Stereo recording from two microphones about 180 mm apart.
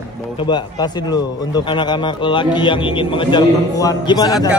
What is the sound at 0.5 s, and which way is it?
A man's voice, 20° left (ahead or behind).